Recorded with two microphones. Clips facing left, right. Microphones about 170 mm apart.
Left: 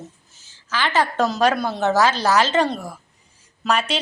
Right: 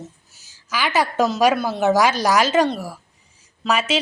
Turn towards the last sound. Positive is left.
turn(degrees=-5)  # may be behind; listen again after turning